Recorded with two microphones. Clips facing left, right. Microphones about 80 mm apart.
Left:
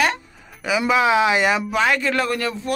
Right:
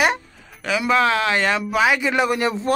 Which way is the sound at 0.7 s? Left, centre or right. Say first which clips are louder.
Left 1 dB; centre.